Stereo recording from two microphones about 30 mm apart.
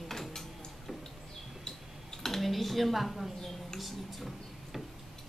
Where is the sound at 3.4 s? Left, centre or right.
Centre.